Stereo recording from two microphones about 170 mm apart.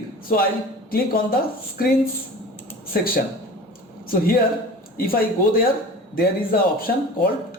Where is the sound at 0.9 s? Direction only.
60° left (ahead or behind).